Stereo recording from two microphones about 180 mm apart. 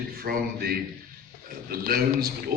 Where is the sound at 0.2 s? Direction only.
60° right (ahead or behind).